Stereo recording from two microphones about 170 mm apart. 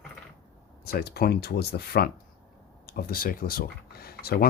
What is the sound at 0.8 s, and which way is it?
Speech, 65° left (ahead or behind).